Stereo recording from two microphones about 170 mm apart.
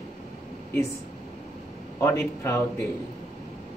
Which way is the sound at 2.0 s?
15° left (ahead or behind).